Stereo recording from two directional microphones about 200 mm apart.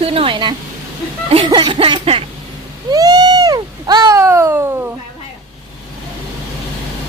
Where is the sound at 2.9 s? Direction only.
20° right (ahead or behind).